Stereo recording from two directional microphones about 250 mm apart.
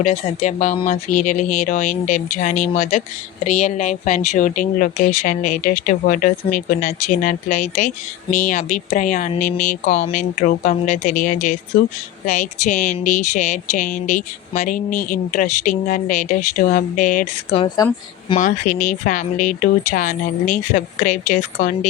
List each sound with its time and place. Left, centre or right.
0.0 s speech: left